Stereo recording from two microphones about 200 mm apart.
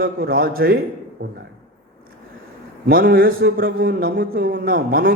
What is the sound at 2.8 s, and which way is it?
A man's voice, 50° right (ahead or behind).